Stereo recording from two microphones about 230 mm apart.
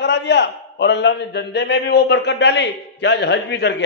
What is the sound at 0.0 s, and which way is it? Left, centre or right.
A man's voice, left.